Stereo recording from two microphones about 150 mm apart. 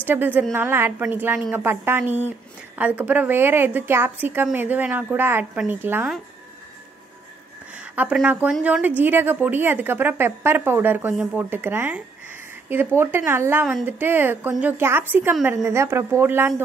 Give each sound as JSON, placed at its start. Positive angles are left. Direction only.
{"t": 0.0, "sound": "a woman's voice", "side_deg": -10}
{"t": 7.9, "sound": "a woman's voice", "side_deg": -10}